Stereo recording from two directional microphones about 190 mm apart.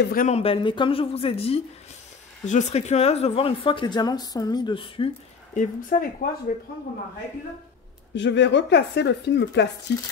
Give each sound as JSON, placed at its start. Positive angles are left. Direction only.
{"t": 0.0, "sound": "a woman's voice", "side_deg": 50}
{"t": 0.3, "sound": "speech", "side_deg": 30}
{"t": 5.5, "sound": "a woman's voice", "side_deg": 40}
{"t": 8.1, "sound": "a woman's voice", "side_deg": 70}